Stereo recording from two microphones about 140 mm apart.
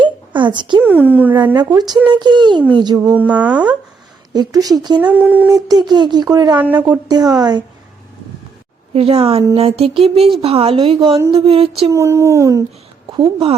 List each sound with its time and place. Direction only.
0.0 s a sound: 35° right (ahead or behind)
0.9 s speech: 10° right (ahead or behind)
2.0 s a woman's voice: 30° right (ahead or behind)
3.0 s speech: 10° right (ahead or behind)
4.3 s speech: 30° right (ahead or behind)
4.9 s speech: 10° right (ahead or behind)
5.5 s speech: 25° right (ahead or behind)
9.0 s a woman's voice: 45° right (ahead or behind)
11.9 s speech: 20° right (ahead or behind)
13.1 s a woman's voice: 35° right (ahead or behind)